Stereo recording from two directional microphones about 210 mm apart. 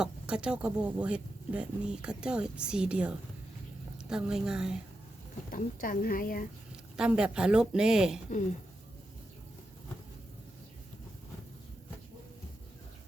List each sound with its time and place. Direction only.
0.0 s speech: 5° right (ahead or behind)
5.5 s speech: 40° left (ahead or behind)
6.9 s speech: 5° right (ahead or behind)